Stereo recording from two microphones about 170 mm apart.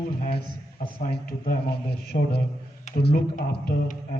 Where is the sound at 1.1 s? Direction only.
60° left (ahead or behind).